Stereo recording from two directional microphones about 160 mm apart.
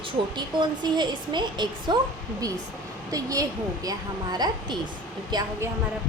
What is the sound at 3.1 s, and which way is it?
A woman's voice, 20° right (ahead or behind).